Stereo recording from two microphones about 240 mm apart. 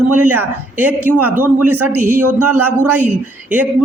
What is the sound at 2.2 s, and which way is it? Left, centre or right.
Speech, right.